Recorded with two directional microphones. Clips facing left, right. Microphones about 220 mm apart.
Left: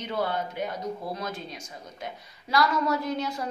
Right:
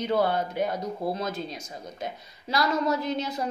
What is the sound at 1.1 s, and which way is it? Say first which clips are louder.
Speech: right 3 dB; 25° right (ahead or behind).